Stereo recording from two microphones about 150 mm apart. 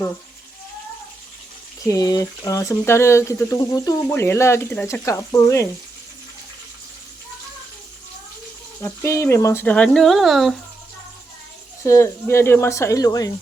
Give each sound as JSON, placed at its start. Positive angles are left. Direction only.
{"t": 1.9, "sound": "speech", "side_deg": 25}
{"t": 8.8, "sound": "speech", "side_deg": 20}
{"t": 11.8, "sound": "speech", "side_deg": 20}